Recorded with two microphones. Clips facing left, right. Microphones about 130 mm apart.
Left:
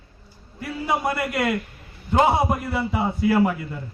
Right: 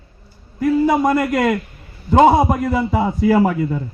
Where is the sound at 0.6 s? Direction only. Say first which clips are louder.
Right 10 dB; 45° right (ahead or behind).